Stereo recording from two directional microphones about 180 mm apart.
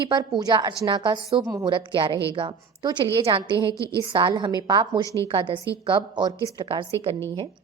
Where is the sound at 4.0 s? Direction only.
25° right (ahead or behind).